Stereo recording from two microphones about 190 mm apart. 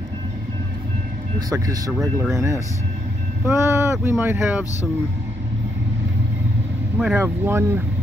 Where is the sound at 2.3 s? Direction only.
15° right (ahead or behind).